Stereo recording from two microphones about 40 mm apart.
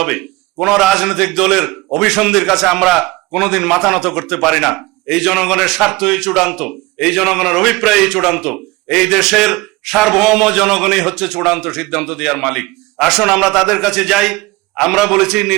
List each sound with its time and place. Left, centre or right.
0.0 s a man's voice: centre